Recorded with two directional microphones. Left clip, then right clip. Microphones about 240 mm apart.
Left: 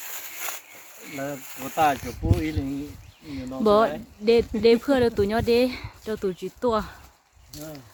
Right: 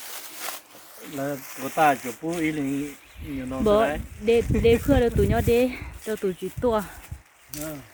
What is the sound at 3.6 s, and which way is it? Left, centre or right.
Speech, centre.